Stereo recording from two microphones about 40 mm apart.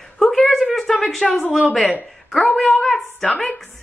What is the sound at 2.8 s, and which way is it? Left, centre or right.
Speech, centre.